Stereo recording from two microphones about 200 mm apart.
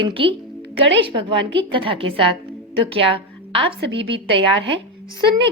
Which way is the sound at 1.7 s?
25° right (ahead or behind).